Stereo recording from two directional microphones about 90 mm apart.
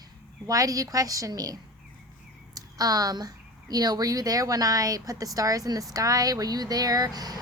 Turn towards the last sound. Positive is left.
turn(degrees=-45)  # may be behind; listen again after turning